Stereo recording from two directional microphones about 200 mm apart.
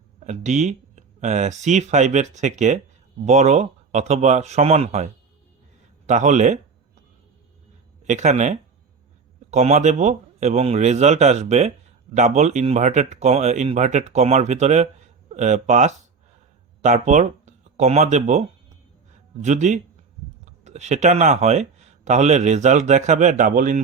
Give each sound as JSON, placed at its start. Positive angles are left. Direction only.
{"t": 0.3, "sound": "speech", "side_deg": -35}
{"t": 6.1, "sound": "a sound", "side_deg": -35}
{"t": 8.0, "sound": "speech", "side_deg": -35}